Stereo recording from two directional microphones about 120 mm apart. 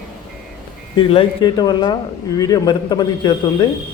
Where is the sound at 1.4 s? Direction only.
35° left (ahead or behind).